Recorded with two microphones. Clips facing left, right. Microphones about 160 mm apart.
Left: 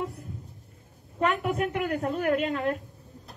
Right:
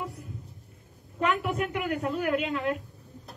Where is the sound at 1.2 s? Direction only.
40° left (ahead or behind).